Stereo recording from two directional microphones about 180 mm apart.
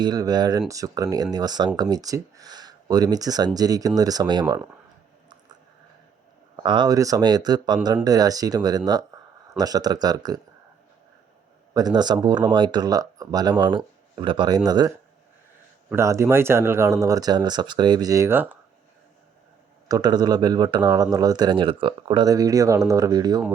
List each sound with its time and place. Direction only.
0.0 s speech: 20° right (ahead or behind)
6.6 s speech: 25° right (ahead or behind)
11.7 s speech: 20° right (ahead or behind)
19.9 s speech: 20° right (ahead or behind)